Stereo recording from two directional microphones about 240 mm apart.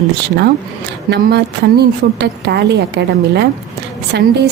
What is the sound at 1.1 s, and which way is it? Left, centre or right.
A woman's voice, right.